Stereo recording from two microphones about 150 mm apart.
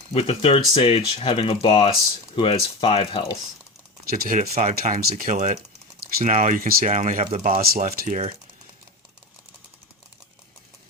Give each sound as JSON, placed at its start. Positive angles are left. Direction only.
{"t": 0.1, "sound": "speech", "side_deg": 40}
{"t": 4.1, "sound": "speech", "side_deg": -65}